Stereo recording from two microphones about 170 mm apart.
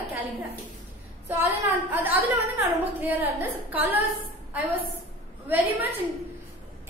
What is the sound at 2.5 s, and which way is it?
A woman's voice, 10° right (ahead or behind).